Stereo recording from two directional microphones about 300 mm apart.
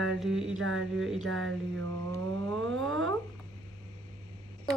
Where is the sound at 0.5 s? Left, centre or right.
Right.